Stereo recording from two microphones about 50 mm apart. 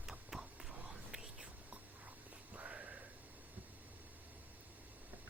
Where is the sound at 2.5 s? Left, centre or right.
Right.